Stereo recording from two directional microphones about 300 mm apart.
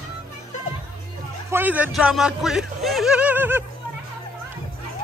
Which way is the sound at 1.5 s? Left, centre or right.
Centre.